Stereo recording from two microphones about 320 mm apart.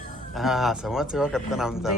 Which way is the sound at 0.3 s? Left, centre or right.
Centre.